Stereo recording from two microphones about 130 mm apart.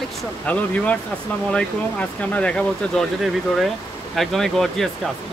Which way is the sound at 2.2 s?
10° left (ahead or behind).